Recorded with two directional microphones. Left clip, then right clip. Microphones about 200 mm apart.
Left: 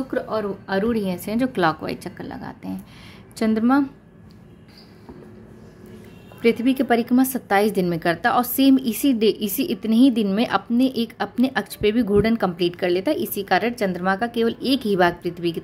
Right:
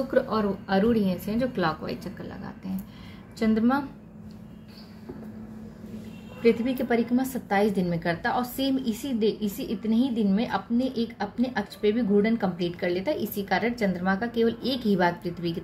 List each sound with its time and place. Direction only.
0.1 s a woman's voice: 25° left (ahead or behind)
6.4 s a woman's voice: 45° left (ahead or behind)